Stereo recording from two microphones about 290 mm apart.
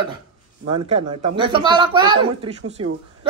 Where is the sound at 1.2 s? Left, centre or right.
Centre.